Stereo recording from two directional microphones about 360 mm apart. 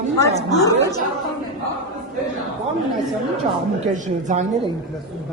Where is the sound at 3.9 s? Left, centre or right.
Centre.